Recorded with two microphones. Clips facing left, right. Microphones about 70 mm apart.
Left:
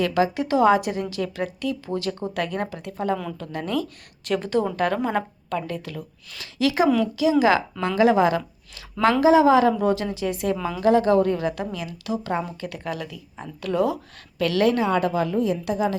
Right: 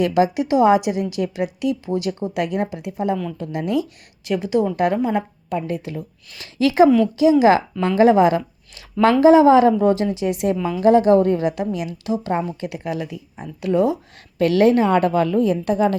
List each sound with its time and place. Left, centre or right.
0.0 s a woman's voice: centre
6.4 s a woman's voice: right
14.3 s a woman's voice: right